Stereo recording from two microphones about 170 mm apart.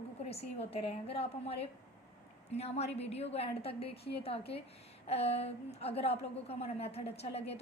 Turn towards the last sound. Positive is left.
turn(degrees=35)  # may be behind; listen again after turning